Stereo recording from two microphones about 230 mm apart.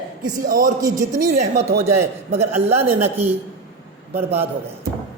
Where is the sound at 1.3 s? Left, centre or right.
Right.